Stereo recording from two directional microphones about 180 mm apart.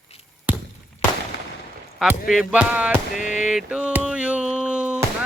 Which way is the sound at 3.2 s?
45° left (ahead or behind).